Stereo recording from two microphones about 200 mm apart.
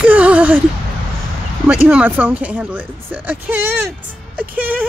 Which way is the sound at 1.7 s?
10° right (ahead or behind).